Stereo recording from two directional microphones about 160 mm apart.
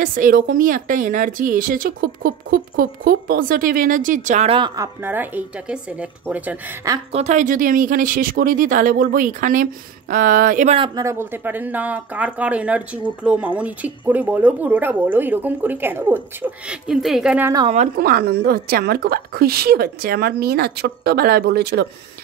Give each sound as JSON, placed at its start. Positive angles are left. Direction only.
{"t": 0.0, "sound": "speech", "side_deg": -55}
{"t": 4.5, "sound": "speech", "side_deg": -30}
{"t": 7.1, "sound": "speech", "side_deg": -45}
{"t": 11.0, "sound": "speech", "side_deg": -15}
{"t": 17.9, "sound": "a woman's voice", "side_deg": -75}